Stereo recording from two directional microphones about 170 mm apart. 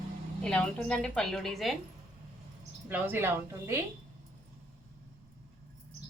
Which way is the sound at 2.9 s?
10° right (ahead or behind).